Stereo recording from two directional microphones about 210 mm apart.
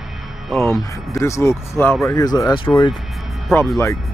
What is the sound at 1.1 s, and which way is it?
Speech, 15° left (ahead or behind).